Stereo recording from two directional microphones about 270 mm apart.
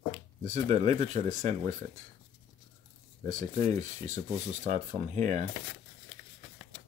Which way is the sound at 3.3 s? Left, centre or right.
Right.